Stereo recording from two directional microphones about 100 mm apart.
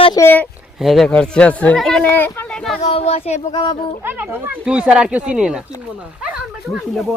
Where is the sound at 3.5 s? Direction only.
45° left (ahead or behind).